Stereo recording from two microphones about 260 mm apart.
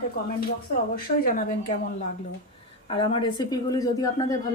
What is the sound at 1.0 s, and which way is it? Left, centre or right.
Speech, left.